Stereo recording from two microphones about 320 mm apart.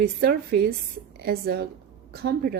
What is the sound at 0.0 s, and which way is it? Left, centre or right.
Speech, right.